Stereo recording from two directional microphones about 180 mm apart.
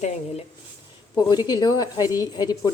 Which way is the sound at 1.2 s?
20° left (ahead or behind).